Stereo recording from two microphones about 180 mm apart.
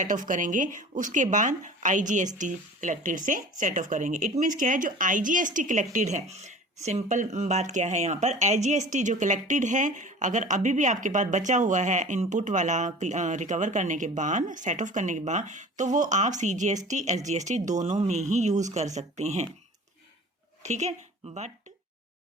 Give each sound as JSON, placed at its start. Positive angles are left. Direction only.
{"t": 0.0, "sound": "speech", "side_deg": -45}
{"t": 20.6, "sound": "speech", "side_deg": -40}